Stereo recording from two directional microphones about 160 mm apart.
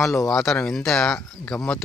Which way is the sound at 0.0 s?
15° left (ahead or behind).